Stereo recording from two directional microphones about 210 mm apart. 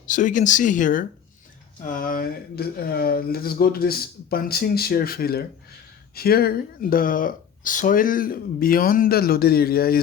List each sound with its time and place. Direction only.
0.1 s speech: 35° left (ahead or behind)